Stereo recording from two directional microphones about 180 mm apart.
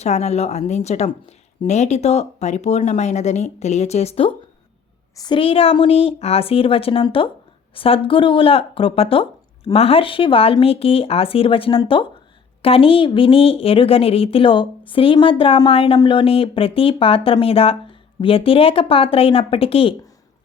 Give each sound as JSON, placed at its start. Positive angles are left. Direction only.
{"t": 0.0, "sound": "a woman's voice", "side_deg": 35}